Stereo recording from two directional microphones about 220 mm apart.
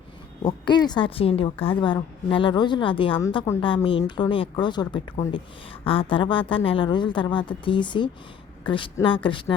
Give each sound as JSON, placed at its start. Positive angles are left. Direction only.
{"t": 0.4, "sound": "a woman's voice", "side_deg": 20}